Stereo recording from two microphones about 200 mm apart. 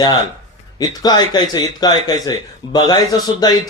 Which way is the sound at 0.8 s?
20° left (ahead or behind).